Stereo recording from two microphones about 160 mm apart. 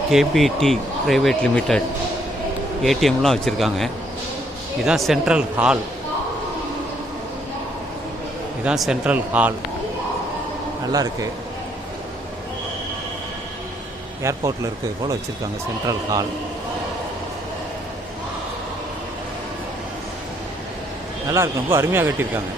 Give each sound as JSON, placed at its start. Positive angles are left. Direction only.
{"t": 0.1, "sound": "speech", "side_deg": 0}
{"t": 2.8, "sound": "speech", "side_deg": 0}
{"t": 8.6, "sound": "speech", "side_deg": -5}
{"t": 10.9, "sound": "speech", "side_deg": -25}
{"t": 14.2, "sound": "speech", "side_deg": -20}
{"t": 21.2, "sound": "speech", "side_deg": -15}